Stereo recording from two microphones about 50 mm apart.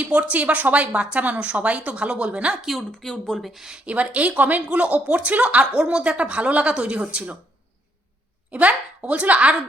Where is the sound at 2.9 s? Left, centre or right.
Centre.